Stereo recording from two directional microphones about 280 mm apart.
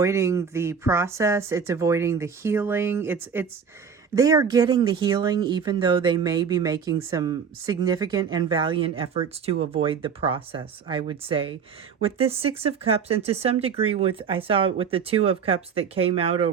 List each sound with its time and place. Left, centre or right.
0.0 s speech: centre